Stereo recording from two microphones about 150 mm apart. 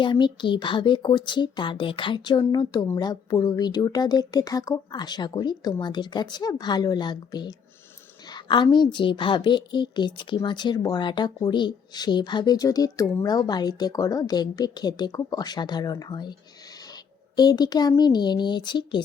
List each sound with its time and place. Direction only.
0.0 s a woman's voice: 35° left (ahead or behind)
17.3 s a woman's voice: 25° left (ahead or behind)